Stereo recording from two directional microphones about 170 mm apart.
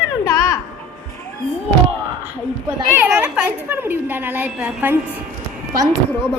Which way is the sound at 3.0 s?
10° right (ahead or behind).